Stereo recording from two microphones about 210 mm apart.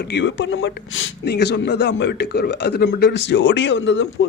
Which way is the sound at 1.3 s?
55° left (ahead or behind).